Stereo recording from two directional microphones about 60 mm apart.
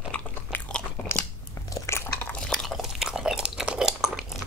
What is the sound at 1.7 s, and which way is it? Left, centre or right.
Biting, left.